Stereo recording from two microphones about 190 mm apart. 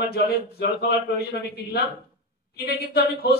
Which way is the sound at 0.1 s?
55° left (ahead or behind).